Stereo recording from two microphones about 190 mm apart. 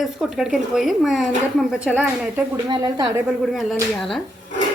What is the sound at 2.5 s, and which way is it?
Speech, 25° right (ahead or behind).